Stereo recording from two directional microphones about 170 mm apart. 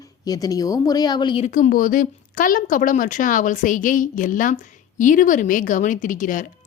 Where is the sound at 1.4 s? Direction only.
50° left (ahead or behind).